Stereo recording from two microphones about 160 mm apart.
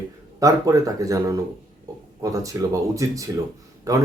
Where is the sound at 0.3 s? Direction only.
20° right (ahead or behind).